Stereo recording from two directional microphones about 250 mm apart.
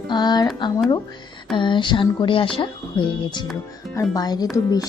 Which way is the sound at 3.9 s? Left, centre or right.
Centre.